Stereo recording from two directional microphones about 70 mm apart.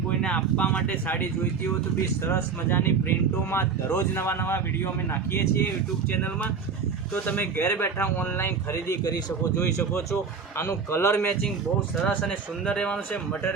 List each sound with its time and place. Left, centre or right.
0.2 s speech: centre
2.2 s speech: left
7.1 s speech: left
8.9 s speech: left
10.9 s speech: left
12.0 s speech: centre